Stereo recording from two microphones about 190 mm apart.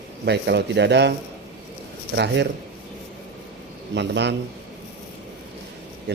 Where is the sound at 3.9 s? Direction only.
65° right (ahead or behind).